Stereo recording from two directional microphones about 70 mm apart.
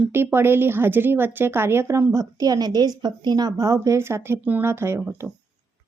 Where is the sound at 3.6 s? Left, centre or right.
Right.